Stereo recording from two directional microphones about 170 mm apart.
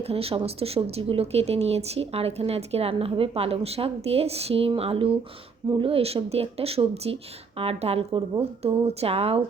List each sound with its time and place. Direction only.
0.0 s speech: 35° right (ahead or behind)